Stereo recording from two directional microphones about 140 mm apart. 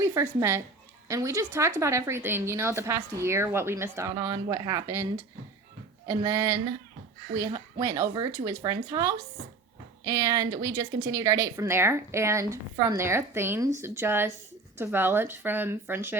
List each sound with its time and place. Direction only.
0.0 s a woman's voice: 20° right (ahead or behind)
6.1 s a woman's voice: 25° right (ahead or behind)